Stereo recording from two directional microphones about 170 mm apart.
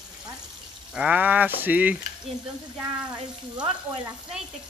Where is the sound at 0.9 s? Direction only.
5° right (ahead or behind).